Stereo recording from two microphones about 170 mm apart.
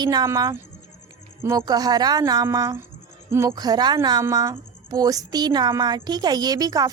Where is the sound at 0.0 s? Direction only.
25° right (ahead or behind).